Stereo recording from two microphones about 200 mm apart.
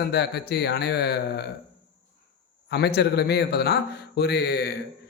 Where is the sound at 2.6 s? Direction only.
55° left (ahead or behind).